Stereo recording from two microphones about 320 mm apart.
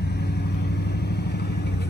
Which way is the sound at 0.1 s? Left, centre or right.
Left.